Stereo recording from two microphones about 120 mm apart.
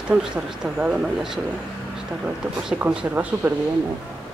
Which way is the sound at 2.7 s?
5° right (ahead or behind).